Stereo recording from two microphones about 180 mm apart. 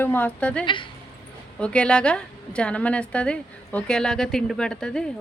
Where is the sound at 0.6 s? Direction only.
25° left (ahead or behind).